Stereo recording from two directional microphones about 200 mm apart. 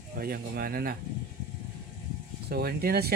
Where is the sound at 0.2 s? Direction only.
50° right (ahead or behind).